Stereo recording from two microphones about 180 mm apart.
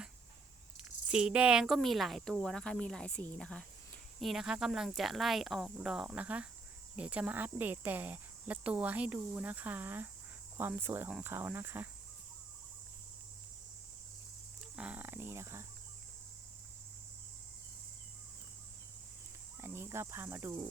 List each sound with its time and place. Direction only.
1.0 s speech: 5° right (ahead or behind)
14.6 s speech: 5° right (ahead or behind)
19.6 s speech: 15° right (ahead or behind)